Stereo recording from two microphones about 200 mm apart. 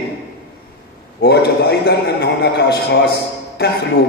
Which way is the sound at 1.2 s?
55° left (ahead or behind).